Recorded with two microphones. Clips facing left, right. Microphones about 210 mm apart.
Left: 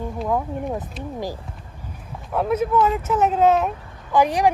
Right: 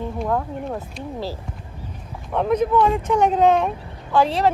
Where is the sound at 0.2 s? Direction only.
5° left (ahead or behind).